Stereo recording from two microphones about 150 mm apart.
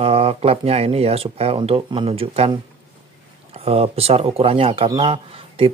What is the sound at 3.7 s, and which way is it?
Speech, 40° right (ahead or behind).